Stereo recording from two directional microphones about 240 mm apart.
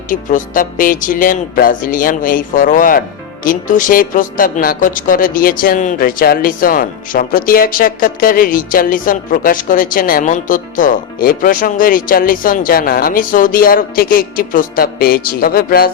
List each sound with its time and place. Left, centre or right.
0.1 s speech: left